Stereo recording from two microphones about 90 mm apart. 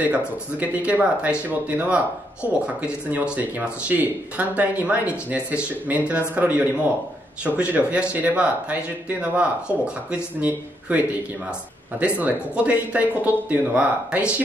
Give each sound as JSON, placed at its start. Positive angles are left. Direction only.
{"t": 0.0, "sound": "speech", "side_deg": -15}
{"t": 12.0, "sound": "speech", "side_deg": -15}